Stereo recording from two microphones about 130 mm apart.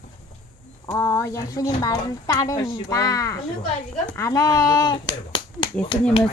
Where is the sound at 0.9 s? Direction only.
25° left (ahead or behind).